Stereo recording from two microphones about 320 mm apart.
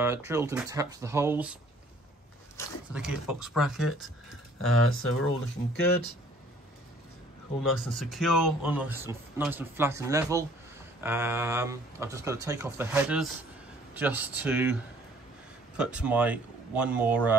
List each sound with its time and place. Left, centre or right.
0.0 s speech: centre
2.9 s speech: centre
4.6 s speech: left
7.6 s speech: centre